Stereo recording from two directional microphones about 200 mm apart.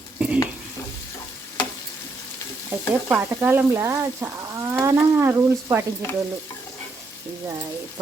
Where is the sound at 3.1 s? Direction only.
10° right (ahead or behind).